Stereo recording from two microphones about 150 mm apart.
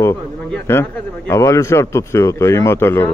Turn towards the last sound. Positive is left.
turn(degrees=15)  # may be behind; listen again after turning